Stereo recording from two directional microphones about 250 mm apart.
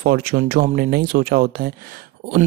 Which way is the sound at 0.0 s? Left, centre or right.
Right.